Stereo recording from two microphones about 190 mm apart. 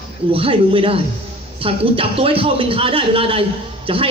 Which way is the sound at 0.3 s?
30° right (ahead or behind).